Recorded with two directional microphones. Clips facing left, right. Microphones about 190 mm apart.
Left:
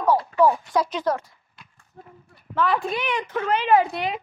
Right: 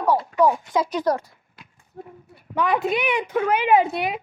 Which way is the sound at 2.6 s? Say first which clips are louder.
Right 2 dB; 20° right (ahead or behind).